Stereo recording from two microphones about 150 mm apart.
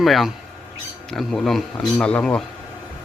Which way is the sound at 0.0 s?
Centre (ahead or behind).